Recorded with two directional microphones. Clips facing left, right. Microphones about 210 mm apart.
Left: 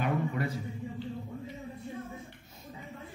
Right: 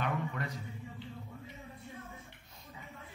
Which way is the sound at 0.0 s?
5° left (ahead or behind).